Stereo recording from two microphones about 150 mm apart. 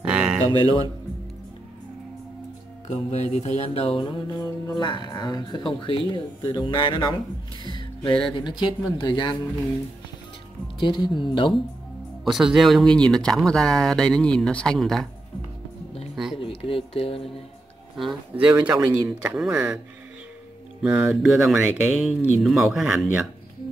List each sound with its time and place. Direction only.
0.0 s a sound: 5° right (ahead or behind)
0.4 s speech: 25° right (ahead or behind)
2.9 s mantra: 50° left (ahead or behind); by 7.2 s 30° left (ahead or behind)
7.6 s music: 35° left (ahead or behind)
8.3 s mantra: 30° left (ahead or behind)
10.8 s mantra: 30° left (ahead or behind)
12.3 s speech: centre (ahead or behind)
16.3 s speech: 35° left (ahead or behind)
17.9 s speech: 5° right (ahead or behind)
20.8 s speech: 10° right (ahead or behind)